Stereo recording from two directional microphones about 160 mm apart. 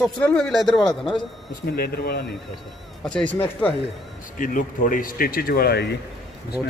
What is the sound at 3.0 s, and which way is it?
Speech, 5° left (ahead or behind).